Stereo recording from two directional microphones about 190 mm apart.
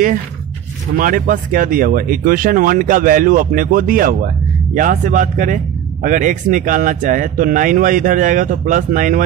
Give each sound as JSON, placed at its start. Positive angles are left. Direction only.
{"t": 0.9, "sound": "speech", "side_deg": -45}